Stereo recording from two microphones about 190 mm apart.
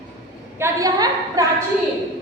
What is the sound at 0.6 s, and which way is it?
Speech, 20° right (ahead or behind).